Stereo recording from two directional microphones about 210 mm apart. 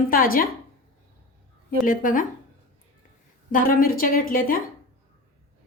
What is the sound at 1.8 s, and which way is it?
Speech, 40° left (ahead or behind).